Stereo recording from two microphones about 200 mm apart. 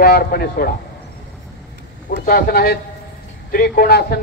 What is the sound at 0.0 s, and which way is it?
Speech, 50° left (ahead or behind).